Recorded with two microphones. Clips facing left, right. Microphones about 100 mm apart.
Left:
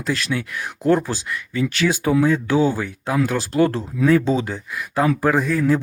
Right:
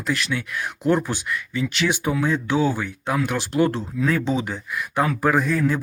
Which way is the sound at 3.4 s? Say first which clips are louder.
Left 2 dB; 25° right (ahead or behind).